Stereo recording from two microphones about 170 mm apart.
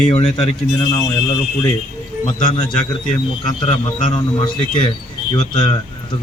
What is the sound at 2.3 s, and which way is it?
Speech, 45° left (ahead or behind).